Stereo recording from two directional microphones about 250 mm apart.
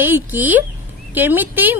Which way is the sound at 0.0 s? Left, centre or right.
Centre.